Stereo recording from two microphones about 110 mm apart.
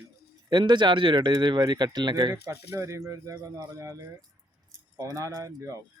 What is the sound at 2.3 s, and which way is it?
Speech, 25° right (ahead or behind).